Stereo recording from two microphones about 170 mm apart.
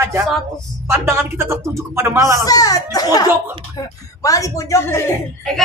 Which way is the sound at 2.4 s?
20° left (ahead or behind).